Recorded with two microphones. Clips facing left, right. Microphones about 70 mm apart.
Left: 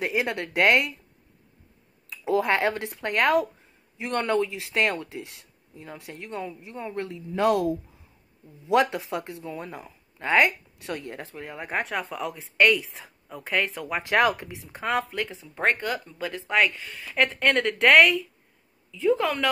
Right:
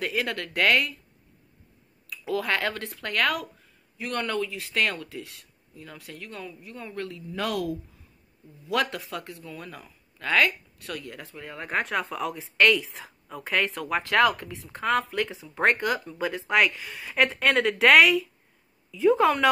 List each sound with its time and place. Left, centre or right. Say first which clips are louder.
0.0 s speech: left 2 dB; left
2.0 s speech: left 4 dB; left
11.6 s speech: right 2 dB; centre
14.0 s speech: even; left
14.5 s speech: right 2 dB; centre
18.9 s a woman's voice: right 2 dB; centre